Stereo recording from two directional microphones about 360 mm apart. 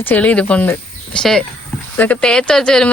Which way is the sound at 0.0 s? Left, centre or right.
Centre.